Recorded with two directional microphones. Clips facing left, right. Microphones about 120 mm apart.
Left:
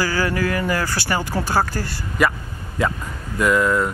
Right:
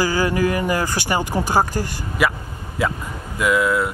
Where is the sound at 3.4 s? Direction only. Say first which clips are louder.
Left 1 dB; 5° right (ahead or behind).